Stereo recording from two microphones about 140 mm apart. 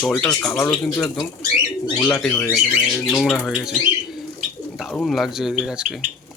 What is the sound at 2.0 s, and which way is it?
Speech, 10° left (ahead or behind).